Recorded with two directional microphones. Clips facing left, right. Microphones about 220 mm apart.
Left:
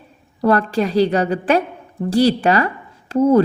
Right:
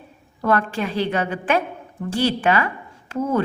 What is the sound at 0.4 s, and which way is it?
A woman's voice, 35° left (ahead or behind).